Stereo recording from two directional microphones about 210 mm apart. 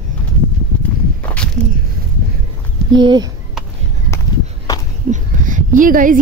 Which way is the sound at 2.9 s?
20° right (ahead or behind).